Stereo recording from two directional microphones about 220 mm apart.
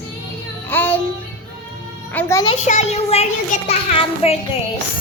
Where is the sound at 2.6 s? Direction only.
30° left (ahead or behind).